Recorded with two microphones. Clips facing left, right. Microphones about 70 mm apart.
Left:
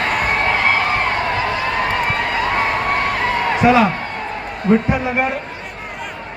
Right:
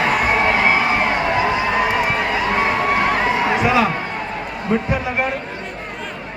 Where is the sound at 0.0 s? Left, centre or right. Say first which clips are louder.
Right 1 dB; centre.